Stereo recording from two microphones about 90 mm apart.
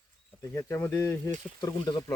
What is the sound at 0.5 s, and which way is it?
Speech, 25° left (ahead or behind).